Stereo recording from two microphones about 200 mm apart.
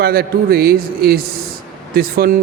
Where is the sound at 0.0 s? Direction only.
50° right (ahead or behind).